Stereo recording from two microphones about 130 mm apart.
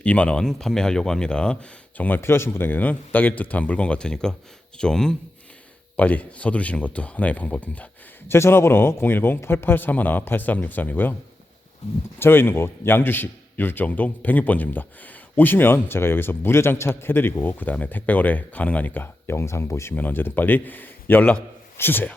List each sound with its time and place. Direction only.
0.0 s a man's voice: 10° left (ahead or behind)
12.2 s a man's voice: 15° left (ahead or behind)